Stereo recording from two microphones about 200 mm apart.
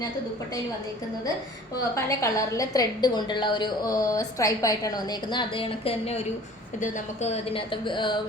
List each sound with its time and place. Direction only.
2.0 s a woman's voice: 15° left (ahead or behind)